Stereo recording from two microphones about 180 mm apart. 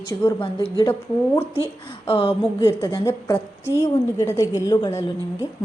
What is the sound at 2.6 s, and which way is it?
A woman's voice, 15° left (ahead or behind).